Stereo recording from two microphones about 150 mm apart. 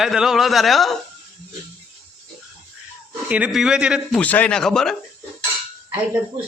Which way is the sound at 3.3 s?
10° right (ahead or behind).